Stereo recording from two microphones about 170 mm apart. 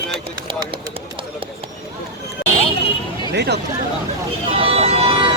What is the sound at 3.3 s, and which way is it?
Speech, 80° right.